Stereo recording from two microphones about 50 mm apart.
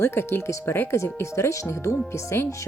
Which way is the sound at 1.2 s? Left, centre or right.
Left.